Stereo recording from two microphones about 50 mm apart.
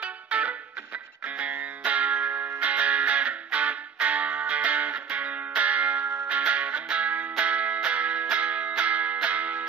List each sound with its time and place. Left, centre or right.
0.0 s music: right